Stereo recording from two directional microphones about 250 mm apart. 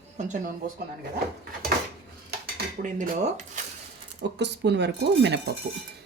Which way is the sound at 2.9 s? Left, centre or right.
Right.